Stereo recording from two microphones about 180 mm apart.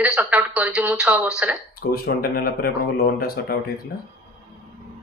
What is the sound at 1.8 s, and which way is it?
Speech, 55° left (ahead or behind).